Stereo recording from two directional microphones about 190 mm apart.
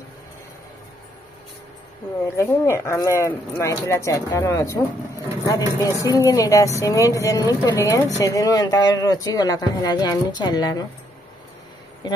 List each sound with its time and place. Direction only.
2.3 s speech: 15° left (ahead or behind)